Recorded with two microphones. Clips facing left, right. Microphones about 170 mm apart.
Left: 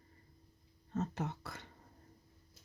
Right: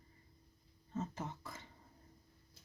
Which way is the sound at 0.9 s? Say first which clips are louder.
Left 4 dB; 70° left (ahead or behind).